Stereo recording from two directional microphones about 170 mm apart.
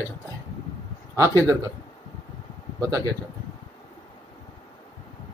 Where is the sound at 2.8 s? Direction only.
20° right (ahead or behind).